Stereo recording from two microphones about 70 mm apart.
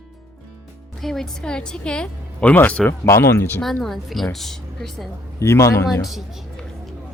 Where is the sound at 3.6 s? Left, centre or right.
Centre.